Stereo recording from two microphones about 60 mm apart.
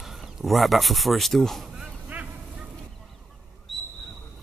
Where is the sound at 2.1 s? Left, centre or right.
Right.